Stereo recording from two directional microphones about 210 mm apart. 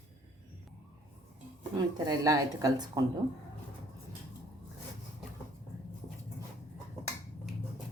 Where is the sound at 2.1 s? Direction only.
15° right (ahead or behind).